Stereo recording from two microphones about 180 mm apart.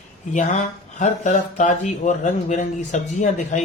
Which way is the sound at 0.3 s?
40° left (ahead or behind).